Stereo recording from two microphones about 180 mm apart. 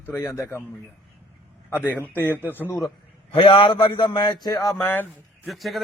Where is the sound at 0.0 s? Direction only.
10° left (ahead or behind).